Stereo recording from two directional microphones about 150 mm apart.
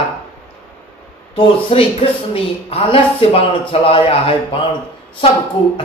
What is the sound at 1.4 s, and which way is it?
A man's voice, 35° left (ahead or behind).